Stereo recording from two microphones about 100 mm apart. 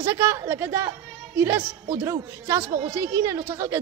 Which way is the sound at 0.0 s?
25° right (ahead or behind).